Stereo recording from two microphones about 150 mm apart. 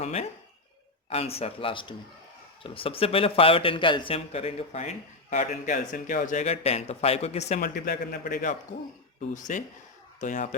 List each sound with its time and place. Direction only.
0.0 s a man's voice: 45° left (ahead or behind)
7.6 s a man's voice: 70° left (ahead or behind); by 10.6 s 55° left (ahead or behind)